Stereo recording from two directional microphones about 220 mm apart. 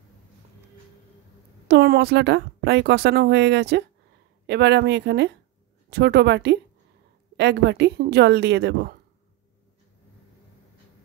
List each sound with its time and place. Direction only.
1.7 s a woman's voice: 50° right (ahead or behind)